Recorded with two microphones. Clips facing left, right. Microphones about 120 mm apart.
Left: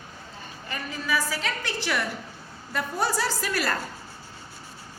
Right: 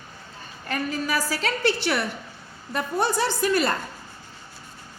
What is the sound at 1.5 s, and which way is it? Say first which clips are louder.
A woman's voice: right 6 dB; 30° right (ahead or behind).